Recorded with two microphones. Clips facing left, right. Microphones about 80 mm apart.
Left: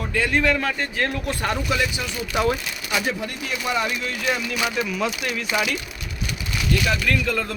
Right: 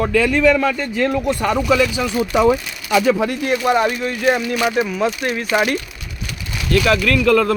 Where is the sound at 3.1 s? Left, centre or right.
Right.